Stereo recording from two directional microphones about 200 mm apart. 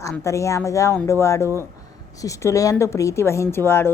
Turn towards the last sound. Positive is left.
turn(degrees=10)  # may be behind; listen again after turning